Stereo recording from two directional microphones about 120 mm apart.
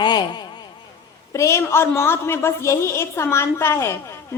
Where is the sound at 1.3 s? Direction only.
25° left (ahead or behind).